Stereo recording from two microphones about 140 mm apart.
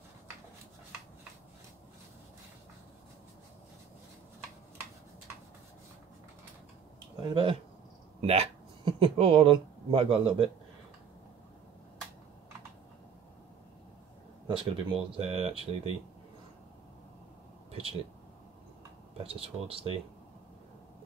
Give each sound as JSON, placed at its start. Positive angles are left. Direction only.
{"t": 8.2, "sound": "speech", "side_deg": -45}
{"t": 14.5, "sound": "speech", "side_deg": -40}
{"t": 17.6, "sound": "a sound", "side_deg": -45}
{"t": 19.1, "sound": "speech", "side_deg": -40}